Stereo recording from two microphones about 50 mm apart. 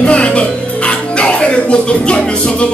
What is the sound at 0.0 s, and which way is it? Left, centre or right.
Music, left.